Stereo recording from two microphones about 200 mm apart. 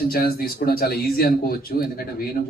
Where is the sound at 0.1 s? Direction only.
50° left (ahead or behind).